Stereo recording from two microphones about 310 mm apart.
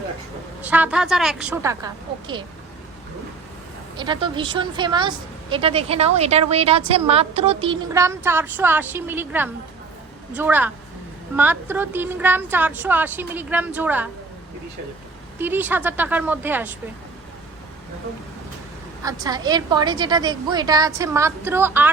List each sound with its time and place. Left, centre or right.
0.6 s a woman's voice: centre
3.9 s a woman's voice: centre
15.4 s a woman's voice: centre
19.0 s a woman's voice: centre